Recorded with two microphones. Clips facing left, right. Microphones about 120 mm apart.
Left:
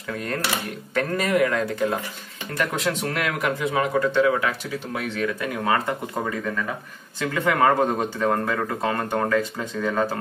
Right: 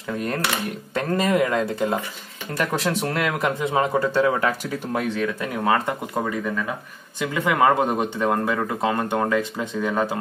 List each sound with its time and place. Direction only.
0.1 s speech: 25° right (ahead or behind)
5.4 s speech: 20° right (ahead or behind)
7.2 s speech: 15° right (ahead or behind)